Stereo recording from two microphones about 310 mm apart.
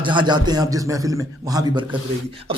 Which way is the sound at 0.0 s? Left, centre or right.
Centre.